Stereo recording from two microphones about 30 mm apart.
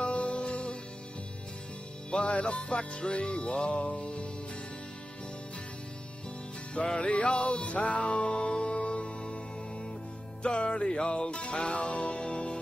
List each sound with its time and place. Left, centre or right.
0.0 s music: left
2.2 s music: left
7.0 s music: left
8.7 s music: left